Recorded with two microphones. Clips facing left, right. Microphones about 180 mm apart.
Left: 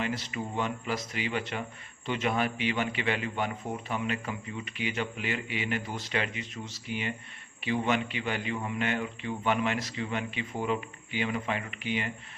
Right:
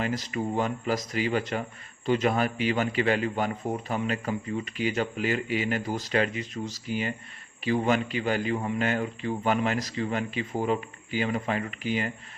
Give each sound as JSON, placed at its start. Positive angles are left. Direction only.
{"t": 0.0, "sound": "a man's voice", "side_deg": -40}